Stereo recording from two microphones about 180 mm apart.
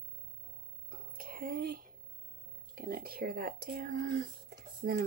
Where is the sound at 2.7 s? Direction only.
55° right (ahead or behind).